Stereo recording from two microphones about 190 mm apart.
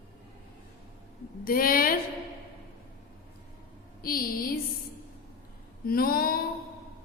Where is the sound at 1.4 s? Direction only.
50° left (ahead or behind).